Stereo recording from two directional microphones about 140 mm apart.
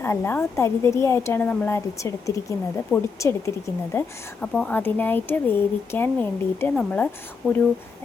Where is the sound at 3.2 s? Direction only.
20° left (ahead or behind).